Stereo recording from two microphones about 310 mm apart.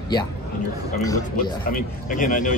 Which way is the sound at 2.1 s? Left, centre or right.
Left.